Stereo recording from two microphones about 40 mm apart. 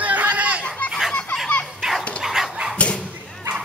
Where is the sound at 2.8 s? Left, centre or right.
Left.